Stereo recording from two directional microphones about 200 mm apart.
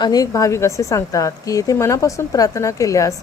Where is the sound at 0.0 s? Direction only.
20° left (ahead or behind).